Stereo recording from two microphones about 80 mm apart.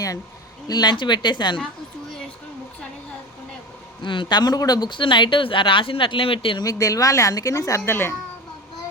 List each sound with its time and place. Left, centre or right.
0.7 s speech: left
4.0 s speech: left
6.6 s speech: left